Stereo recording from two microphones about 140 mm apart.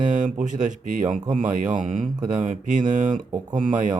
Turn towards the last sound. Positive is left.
turn(degrees=-65)  # may be behind; listen again after turning